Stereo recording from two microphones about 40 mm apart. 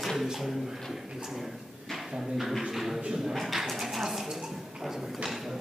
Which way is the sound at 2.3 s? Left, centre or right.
Centre.